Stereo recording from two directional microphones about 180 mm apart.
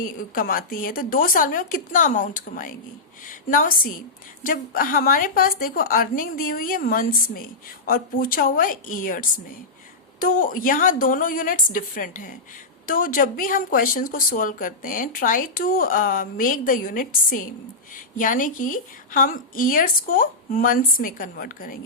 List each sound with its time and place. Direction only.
0.0 s a woman's voice: 50° left (ahead or behind)